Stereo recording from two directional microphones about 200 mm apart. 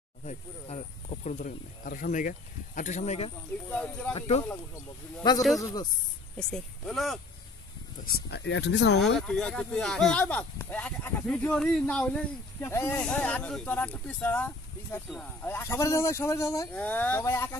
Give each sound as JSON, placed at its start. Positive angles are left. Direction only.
{"t": 0.2, "sound": "speech", "side_deg": 35}
{"t": 3.7, "sound": "speech", "side_deg": 5}
{"t": 4.1, "sound": "speech", "side_deg": 30}
{"t": 5.6, "sound": "speech", "side_deg": 15}
{"t": 6.3, "sound": "speech", "side_deg": 5}
{"t": 8.0, "sound": "speech", "side_deg": 50}
{"t": 9.3, "sound": "speech", "side_deg": 5}